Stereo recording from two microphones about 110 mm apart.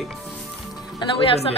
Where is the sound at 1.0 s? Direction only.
55° left (ahead or behind).